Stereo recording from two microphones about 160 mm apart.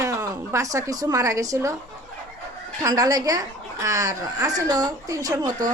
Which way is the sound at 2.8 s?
25° right (ahead or behind).